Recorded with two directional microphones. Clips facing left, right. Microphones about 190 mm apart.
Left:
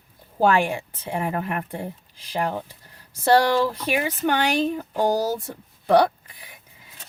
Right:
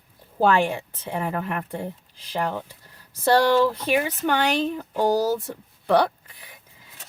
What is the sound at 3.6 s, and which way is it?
Speech, 10° left (ahead or behind).